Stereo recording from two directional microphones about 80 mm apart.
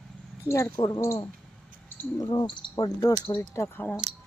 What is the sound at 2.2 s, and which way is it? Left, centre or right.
Cricket, left.